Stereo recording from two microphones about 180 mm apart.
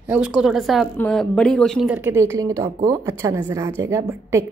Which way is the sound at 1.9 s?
10° right (ahead or behind).